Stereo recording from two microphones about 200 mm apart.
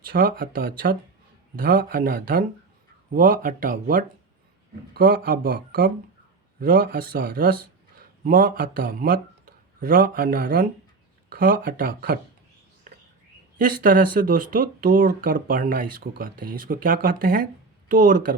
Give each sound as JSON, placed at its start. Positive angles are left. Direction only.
{"t": 0.0, "sound": "speech", "side_deg": -45}
{"t": 13.6, "sound": "speech", "side_deg": -45}